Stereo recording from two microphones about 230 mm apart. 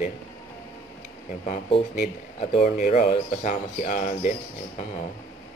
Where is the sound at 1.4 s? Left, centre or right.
Left.